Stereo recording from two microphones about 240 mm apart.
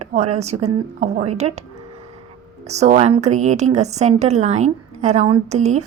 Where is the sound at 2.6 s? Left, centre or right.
Right.